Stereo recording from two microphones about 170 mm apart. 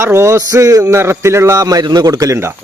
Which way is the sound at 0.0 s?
15° right (ahead or behind).